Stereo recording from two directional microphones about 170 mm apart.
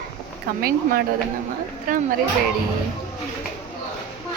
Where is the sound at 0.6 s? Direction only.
60° right (ahead or behind).